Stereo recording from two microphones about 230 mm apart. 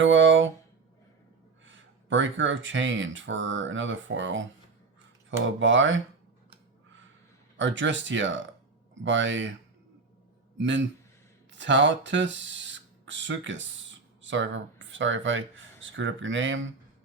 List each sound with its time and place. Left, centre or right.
0.0 s a sound: right
1.6 s speech: right
5.5 s speech: right
7.5 s speech: right
10.6 s speech: right